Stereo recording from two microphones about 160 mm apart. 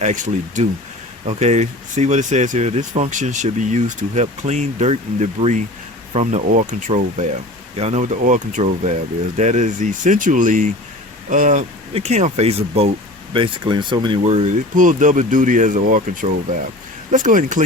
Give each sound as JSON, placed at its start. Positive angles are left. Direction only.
{"t": 0.0, "sound": "speech", "side_deg": -50}
{"t": 14.3, "sound": "speech", "side_deg": -50}